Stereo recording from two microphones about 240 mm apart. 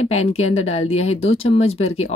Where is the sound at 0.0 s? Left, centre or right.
Left.